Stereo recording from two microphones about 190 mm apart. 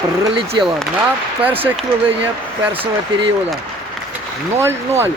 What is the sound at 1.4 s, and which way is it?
Speech, 10° right (ahead or behind).